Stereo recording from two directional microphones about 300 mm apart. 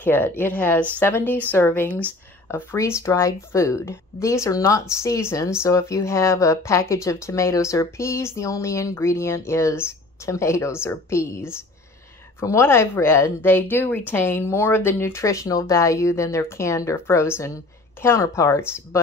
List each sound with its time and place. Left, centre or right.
0.0 s speech: centre